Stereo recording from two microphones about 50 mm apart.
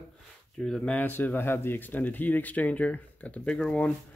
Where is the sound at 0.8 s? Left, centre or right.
Left.